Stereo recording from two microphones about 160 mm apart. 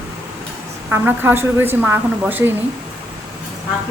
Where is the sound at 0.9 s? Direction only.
10° right (ahead or behind).